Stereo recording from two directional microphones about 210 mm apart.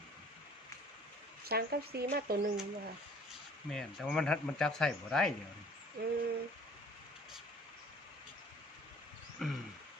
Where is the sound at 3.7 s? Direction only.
Centre (ahead or behind).